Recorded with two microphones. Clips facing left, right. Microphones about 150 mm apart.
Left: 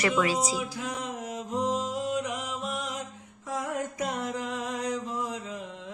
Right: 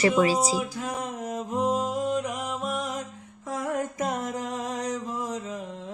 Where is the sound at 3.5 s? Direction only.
50° right (ahead or behind).